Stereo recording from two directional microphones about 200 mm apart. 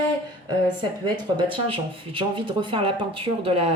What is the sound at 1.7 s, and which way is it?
Speech, 25° right (ahead or behind).